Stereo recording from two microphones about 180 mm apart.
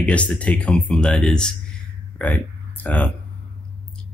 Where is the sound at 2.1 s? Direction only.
10° left (ahead or behind).